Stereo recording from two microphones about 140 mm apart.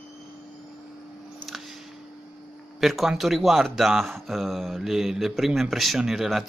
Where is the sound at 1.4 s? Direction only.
Centre (ahead or behind).